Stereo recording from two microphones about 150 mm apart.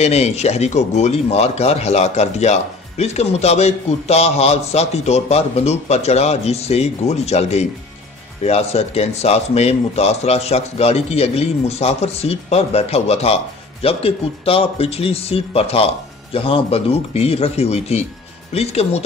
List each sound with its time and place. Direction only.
0.0 s speech: 45° left (ahead or behind)